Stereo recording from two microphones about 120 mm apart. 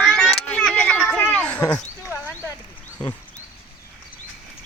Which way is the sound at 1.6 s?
30° left (ahead or behind).